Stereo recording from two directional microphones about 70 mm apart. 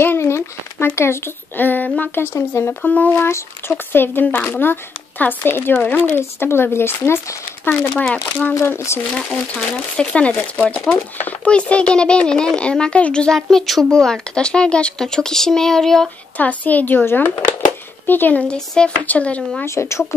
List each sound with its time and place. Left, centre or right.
0.0 s a child's voice: left
2.8 s speech: centre
3.1 s speech: left
8.1 s a child's voice: centre
8.6 s speech: left
9.1 s a child's voice: centre
16.3 s speech: left
18.5 s speech: centre
19.6 s speech: left